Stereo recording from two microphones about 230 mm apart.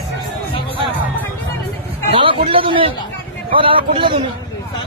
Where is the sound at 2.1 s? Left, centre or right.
Right.